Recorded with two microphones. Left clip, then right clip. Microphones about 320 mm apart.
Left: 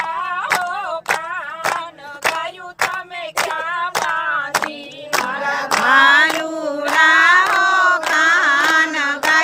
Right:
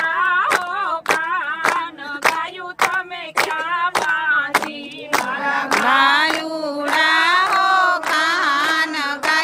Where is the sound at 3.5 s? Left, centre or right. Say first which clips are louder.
Right 1 dB; left.